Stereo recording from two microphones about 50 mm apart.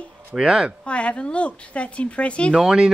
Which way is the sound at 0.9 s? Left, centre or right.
Left.